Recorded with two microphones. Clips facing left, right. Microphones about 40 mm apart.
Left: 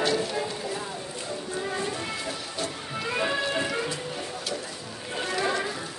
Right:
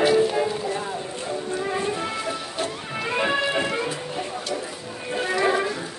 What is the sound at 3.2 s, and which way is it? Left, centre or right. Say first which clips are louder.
Music: right 4 dB; right.